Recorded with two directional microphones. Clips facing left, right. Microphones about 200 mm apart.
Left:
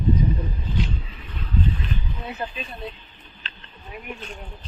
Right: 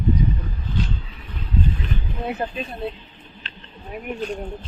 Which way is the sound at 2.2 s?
55° right (ahead or behind).